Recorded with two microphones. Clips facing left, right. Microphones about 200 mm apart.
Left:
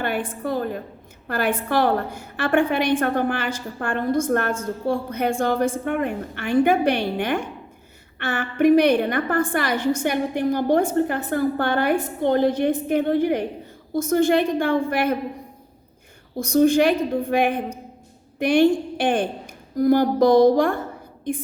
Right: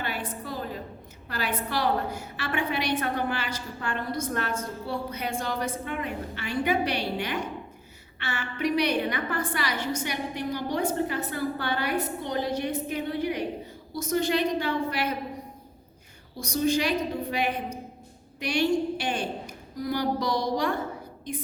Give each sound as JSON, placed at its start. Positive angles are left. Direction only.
{"t": 0.0, "sound": "a woman's voice", "side_deg": 55}
{"t": 16.4, "sound": "a woman's voice", "side_deg": 50}